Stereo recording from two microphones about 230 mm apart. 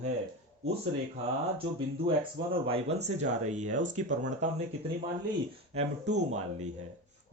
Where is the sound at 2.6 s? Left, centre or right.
Right.